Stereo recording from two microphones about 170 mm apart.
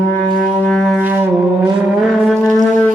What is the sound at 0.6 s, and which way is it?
Music, 5° left (ahead or behind).